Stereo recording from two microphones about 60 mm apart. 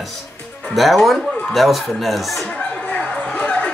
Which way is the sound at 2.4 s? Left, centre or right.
Centre.